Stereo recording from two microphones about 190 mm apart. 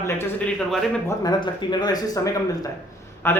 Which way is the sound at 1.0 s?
20° left (ahead or behind).